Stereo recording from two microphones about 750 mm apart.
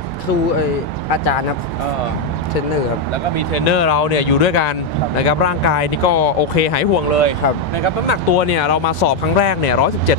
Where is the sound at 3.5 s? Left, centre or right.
Left.